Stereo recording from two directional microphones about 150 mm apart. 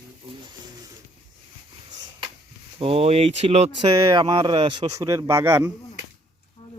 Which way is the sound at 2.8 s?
40° right (ahead or behind).